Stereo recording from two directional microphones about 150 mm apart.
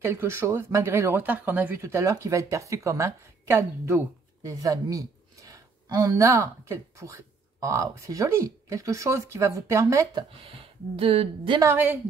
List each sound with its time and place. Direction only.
0.0 s speech: 15° right (ahead or behind)
11.0 s a woman's voice: 40° right (ahead or behind)
11.6 s a woman's voice: 15° right (ahead or behind)